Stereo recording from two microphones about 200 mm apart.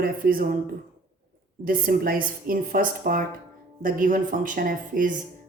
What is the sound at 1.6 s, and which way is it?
A woman's voice, 45° right (ahead or behind).